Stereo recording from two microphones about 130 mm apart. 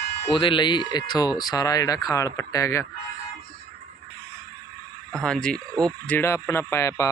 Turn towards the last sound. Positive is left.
turn(degrees=20)  # may be behind; listen again after turning